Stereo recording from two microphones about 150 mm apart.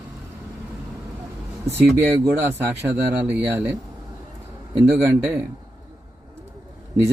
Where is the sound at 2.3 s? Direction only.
15° right (ahead or behind).